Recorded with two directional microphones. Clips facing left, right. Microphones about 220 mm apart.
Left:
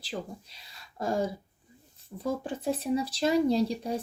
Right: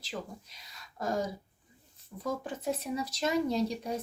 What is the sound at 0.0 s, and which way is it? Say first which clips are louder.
Speech: left 3 dB; 30° left (ahead or behind).